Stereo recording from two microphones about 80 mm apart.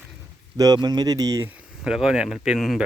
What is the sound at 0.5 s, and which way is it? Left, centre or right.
Speech, right.